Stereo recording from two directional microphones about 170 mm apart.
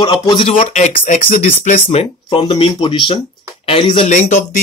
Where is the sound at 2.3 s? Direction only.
30° left (ahead or behind).